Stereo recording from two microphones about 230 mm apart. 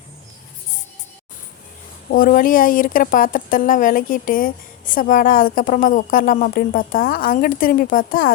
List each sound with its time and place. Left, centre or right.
2.0 s speech: left